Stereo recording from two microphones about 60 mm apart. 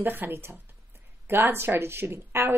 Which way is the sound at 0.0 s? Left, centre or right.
Right.